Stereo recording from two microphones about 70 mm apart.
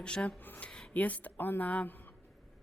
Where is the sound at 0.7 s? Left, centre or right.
Centre.